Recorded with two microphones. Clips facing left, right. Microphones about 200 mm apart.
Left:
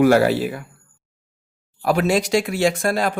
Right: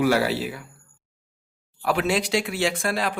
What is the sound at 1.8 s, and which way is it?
Speech, 40° left (ahead or behind).